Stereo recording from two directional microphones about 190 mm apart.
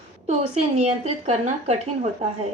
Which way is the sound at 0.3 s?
35° right (ahead or behind).